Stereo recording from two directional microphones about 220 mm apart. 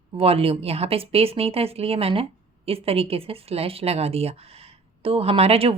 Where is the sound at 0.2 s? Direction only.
25° right (ahead or behind).